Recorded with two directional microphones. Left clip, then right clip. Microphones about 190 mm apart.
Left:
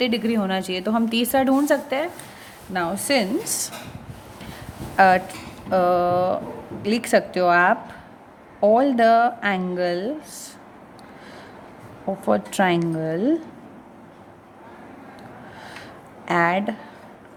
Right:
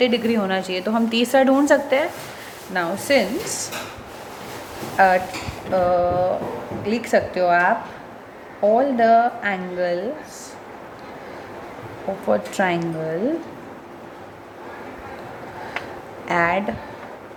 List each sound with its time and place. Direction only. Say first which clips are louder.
0.0 s a woman's voice: right 4 dB; 40° left (ahead or behind)
4.9 s a woman's voice: even; 45° left (ahead or behind)
12.3 s a woman's voice: even; 45° left (ahead or behind)
16.2 s a woman's voice: right 1 dB; 40° left (ahead or behind)